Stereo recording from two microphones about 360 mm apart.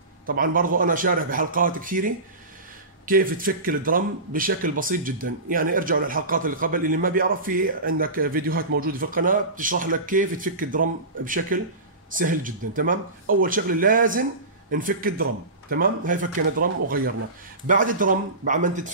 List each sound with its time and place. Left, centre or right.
0.3 s speech: right